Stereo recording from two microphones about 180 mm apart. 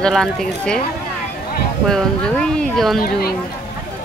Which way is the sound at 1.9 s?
5° left (ahead or behind).